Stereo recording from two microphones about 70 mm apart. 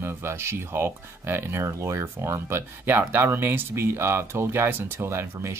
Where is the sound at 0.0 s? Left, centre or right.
Right.